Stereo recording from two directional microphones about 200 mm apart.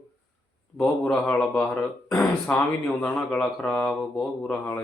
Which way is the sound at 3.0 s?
5° left (ahead or behind).